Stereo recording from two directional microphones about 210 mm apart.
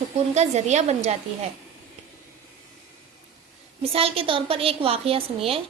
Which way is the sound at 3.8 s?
30° right (ahead or behind).